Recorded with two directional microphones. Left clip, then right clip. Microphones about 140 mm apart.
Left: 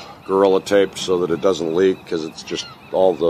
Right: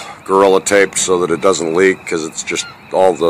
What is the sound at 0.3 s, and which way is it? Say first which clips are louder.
Speech: right 5 dB; 20° right (ahead or behind).